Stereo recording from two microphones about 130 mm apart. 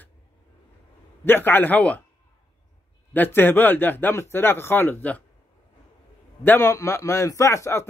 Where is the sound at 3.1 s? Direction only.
15° left (ahead or behind).